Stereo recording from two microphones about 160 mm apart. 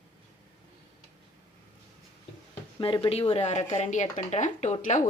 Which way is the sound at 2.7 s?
35° left (ahead or behind).